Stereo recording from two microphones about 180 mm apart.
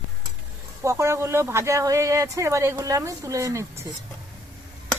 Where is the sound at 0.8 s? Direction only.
15° right (ahead or behind).